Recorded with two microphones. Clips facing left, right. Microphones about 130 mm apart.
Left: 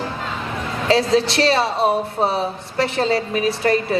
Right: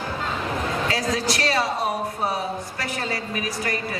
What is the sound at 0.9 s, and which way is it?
A woman's voice, 25° left (ahead or behind).